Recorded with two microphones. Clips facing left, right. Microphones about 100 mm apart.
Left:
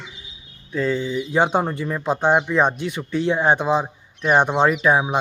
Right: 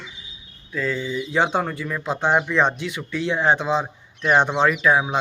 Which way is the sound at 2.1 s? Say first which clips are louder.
Left 2 dB; 15° left (ahead or behind).